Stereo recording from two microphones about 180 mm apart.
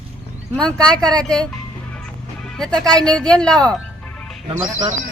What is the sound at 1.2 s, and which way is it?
Speech, 5° left (ahead or behind).